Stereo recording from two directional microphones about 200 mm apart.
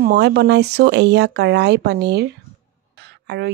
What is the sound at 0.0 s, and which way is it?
Speech, 55° right (ahead or behind).